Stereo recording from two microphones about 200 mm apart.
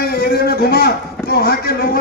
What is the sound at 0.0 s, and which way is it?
A man's voice, 50° left (ahead or behind).